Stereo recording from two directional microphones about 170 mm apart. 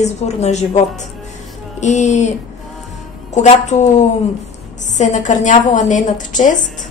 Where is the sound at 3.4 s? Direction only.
45° left (ahead or behind).